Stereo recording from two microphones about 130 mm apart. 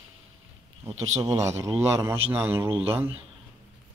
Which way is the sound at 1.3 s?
20° right (ahead or behind).